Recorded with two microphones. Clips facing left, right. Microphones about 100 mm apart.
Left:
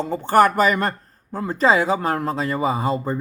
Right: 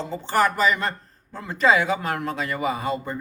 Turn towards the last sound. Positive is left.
turn(degrees=30)  # may be behind; listen again after turning